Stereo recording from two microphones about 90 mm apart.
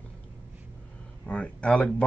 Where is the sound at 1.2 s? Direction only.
15° left (ahead or behind).